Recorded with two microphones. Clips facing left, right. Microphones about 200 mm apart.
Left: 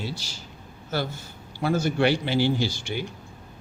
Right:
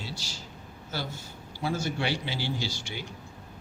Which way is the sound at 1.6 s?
55° left (ahead or behind).